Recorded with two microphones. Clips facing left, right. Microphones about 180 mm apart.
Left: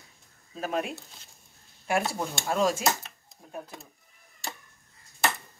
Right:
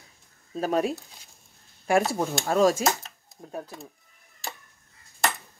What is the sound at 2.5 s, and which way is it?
Speech, 40° right (ahead or behind).